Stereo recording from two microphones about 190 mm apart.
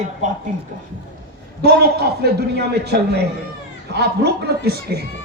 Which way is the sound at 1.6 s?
55° right (ahead or behind).